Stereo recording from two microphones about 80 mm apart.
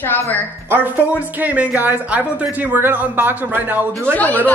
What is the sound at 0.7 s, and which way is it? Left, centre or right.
Speech, right.